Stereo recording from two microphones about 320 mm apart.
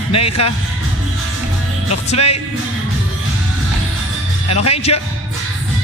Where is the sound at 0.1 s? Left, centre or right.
Centre.